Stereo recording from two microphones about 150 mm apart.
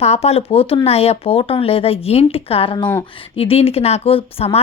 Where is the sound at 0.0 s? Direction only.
45° left (ahead or behind).